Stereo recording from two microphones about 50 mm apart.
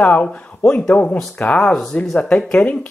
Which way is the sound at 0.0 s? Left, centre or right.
Left.